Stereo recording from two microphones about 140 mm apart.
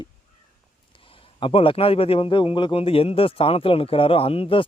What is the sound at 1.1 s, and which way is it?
A man's voice, 40° left (ahead or behind).